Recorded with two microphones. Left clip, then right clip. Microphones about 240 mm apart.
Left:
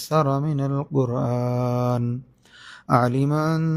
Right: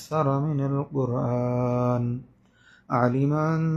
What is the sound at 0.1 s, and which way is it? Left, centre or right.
Mantra, left.